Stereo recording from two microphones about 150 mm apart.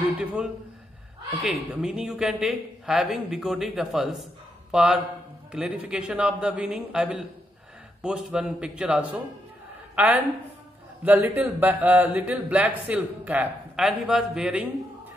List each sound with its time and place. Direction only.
0.2 s a man's voice: 10° right (ahead or behind)